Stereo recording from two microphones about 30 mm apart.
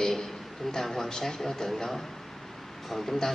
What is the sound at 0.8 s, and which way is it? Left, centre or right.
Speech, centre.